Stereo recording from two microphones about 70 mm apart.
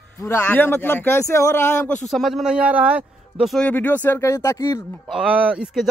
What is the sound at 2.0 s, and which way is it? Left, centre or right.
Speech, centre.